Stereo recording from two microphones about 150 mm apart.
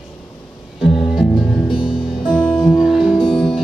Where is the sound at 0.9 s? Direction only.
35° left (ahead or behind).